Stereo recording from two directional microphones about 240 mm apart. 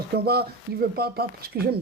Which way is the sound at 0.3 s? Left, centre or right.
Right.